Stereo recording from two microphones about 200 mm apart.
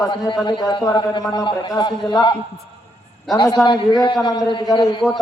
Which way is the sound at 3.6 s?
20° left (ahead or behind).